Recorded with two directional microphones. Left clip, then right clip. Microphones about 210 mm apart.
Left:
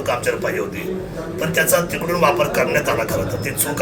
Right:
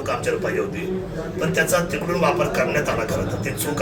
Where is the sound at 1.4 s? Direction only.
15° left (ahead or behind).